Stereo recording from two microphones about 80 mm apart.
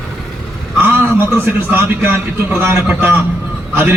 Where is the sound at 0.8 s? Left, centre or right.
Right.